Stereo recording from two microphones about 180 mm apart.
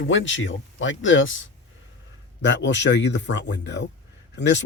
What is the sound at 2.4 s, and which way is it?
Speech, 80° left.